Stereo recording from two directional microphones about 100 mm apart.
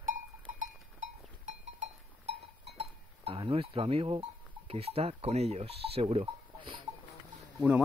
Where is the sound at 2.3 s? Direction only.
75° right (ahead or behind).